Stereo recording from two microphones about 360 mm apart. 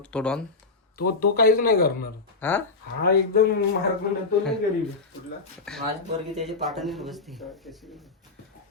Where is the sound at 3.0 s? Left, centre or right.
Left.